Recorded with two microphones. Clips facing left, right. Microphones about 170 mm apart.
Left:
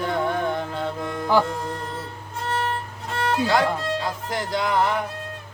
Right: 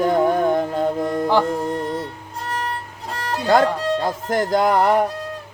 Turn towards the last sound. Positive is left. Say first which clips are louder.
# right 6 dB
turn(degrees=-55)  # may be behind; listen again after turning